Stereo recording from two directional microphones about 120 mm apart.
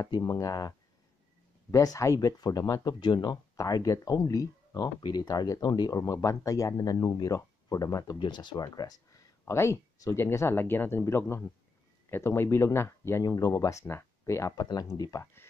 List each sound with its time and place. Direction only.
0.0 s speech: 35° left (ahead or behind)